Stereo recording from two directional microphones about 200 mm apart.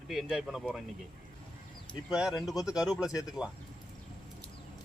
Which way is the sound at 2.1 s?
5° right (ahead or behind).